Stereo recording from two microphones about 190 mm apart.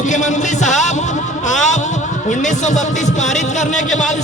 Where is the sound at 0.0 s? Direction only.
40° left (ahead or behind).